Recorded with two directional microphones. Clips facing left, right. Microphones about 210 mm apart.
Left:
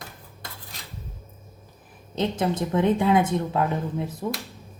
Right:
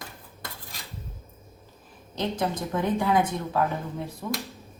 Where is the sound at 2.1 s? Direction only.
25° left (ahead or behind).